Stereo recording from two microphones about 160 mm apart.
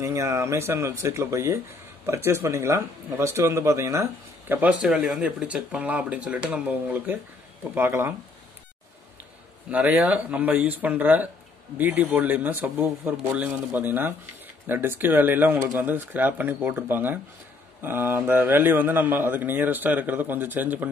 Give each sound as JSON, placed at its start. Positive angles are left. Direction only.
{"t": 0.0, "sound": "speech", "side_deg": -20}
{"t": 9.7, "sound": "speech", "side_deg": -10}